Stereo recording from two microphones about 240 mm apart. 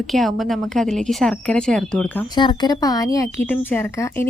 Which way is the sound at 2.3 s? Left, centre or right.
Centre.